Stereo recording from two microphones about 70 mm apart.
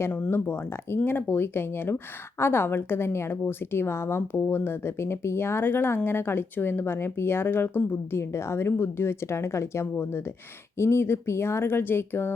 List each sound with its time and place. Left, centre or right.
0.3 s speech: left